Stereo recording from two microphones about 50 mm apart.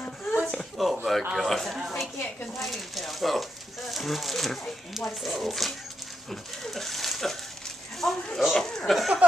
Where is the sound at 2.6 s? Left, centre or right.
Centre.